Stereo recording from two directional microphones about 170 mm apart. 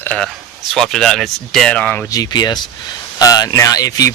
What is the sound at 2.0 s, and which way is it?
Speech, 20° left (ahead or behind).